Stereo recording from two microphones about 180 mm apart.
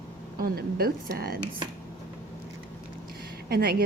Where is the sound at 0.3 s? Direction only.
55° right (ahead or behind).